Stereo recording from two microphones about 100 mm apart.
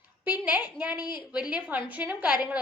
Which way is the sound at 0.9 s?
45° left (ahead or behind).